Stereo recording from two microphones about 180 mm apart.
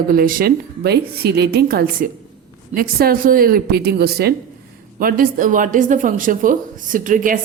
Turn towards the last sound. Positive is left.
turn(degrees=-45)  # may be behind; listen again after turning